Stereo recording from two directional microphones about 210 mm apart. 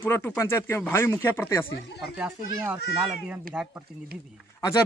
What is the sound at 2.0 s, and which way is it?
Speech, 5° right (ahead or behind).